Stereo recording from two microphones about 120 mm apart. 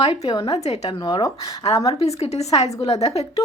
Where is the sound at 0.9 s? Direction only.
35° left (ahead or behind).